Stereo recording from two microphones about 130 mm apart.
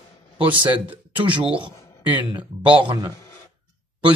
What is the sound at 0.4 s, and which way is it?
Speech, 40° right (ahead or behind).